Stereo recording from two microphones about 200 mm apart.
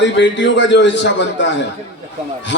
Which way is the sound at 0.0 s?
60° left (ahead or behind).